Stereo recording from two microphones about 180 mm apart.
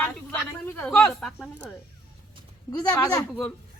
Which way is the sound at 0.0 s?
10° left (ahead or behind).